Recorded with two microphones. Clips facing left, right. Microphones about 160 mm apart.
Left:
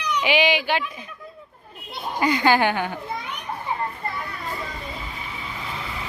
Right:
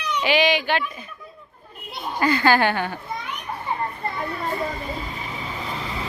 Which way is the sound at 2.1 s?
15° left (ahead or behind).